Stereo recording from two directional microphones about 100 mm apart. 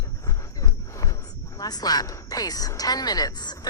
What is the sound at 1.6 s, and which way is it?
Speech, 40° left (ahead or behind).